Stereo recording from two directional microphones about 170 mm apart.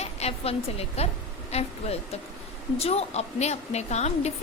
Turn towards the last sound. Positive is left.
turn(degrees=40)  # may be behind; listen again after turning